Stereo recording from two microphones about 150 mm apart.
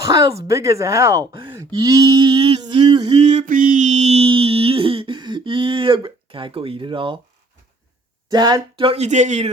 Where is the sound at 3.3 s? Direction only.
60° right (ahead or behind); by 7.2 s 35° right (ahead or behind).